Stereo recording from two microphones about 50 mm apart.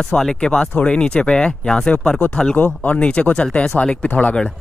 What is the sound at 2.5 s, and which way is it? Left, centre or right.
Speech, left.